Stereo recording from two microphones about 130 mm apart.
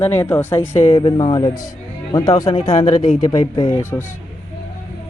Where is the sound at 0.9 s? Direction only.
40° left (ahead or behind); by 4.0 s 20° left (ahead or behind).